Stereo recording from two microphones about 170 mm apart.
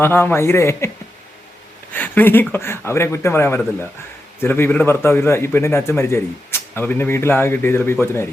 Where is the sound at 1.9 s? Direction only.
10° left (ahead or behind).